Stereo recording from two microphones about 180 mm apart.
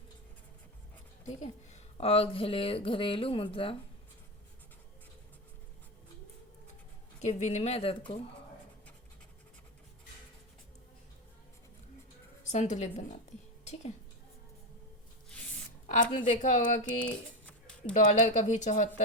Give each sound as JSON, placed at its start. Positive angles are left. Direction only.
{"t": 1.4, "sound": "speech", "side_deg": 35}
{"t": 7.2, "sound": "speech", "side_deg": 40}
{"t": 12.5, "sound": "speech", "side_deg": 40}
{"t": 15.9, "sound": "a woman's voice", "side_deg": 45}
{"t": 17.4, "sound": "a sound", "side_deg": 5}
{"t": 17.9, "sound": "speech", "side_deg": 40}